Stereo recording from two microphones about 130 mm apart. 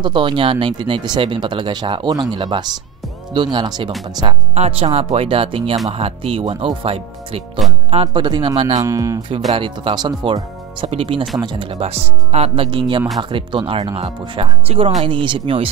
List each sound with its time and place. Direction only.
0.0 s speech: 40° right (ahead or behind)
4.6 s speech: 50° right (ahead or behind)
8.5 s speech: 65° right (ahead or behind)
8.8 s speech: 25° right (ahead or behind)
9.6 s speech: 40° right (ahead or behind)